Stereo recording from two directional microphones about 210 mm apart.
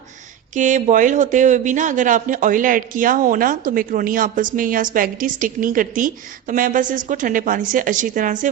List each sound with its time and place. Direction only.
0.5 s speech: 35° right (ahead or behind)